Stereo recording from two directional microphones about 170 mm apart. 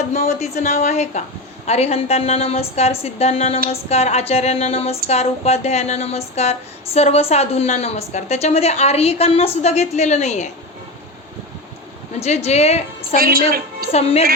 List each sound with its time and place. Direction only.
0.1 s speech: 40° left (ahead or behind)
12.2 s speech: 40° left (ahead or behind)
13.1 s a woman's voice: 60° right (ahead or behind)
13.9 s speech: 35° left (ahead or behind)